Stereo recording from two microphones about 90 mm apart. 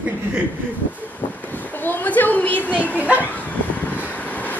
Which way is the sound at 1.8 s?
20° left (ahead or behind).